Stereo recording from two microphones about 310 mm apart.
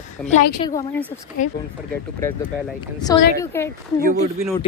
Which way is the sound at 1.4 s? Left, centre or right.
Left.